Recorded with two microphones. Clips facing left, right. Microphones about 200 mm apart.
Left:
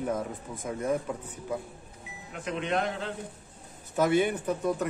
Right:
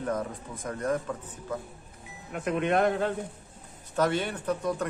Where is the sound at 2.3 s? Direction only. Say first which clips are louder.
Right 4 dB; 55° right (ahead or behind).